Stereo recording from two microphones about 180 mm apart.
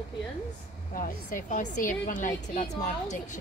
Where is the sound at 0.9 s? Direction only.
50° left (ahead or behind).